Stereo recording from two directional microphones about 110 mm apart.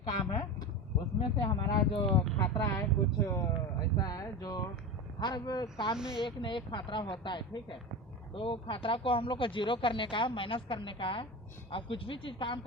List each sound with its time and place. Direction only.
0.1 s speech: 45° left (ahead or behind)
2.4 s speech: 25° left (ahead or behind); by 12.5 s 50° left (ahead or behind)